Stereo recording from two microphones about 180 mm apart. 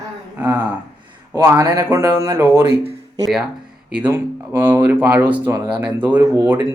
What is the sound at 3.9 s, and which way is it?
Speech, 10° right (ahead or behind).